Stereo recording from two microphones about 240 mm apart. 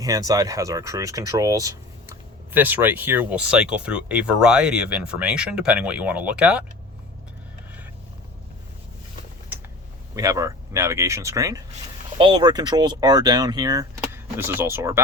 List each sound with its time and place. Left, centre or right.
0.0 s speech: centre
10.2 s speech: centre